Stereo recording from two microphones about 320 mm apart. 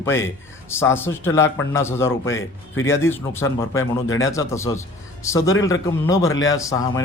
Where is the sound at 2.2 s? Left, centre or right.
Left.